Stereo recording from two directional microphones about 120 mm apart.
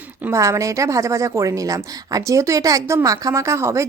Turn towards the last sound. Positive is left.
turn(degrees=-25)  # may be behind; listen again after turning